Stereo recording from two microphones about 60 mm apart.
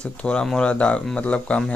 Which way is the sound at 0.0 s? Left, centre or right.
Centre.